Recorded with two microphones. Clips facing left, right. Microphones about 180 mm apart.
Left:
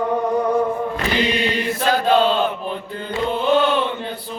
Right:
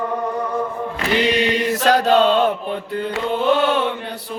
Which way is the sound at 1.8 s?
85° right.